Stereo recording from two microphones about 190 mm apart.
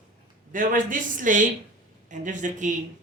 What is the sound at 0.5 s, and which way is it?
Speech, 45° right (ahead or behind).